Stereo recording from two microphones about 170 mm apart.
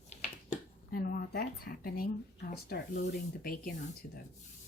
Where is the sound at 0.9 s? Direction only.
60° left (ahead or behind).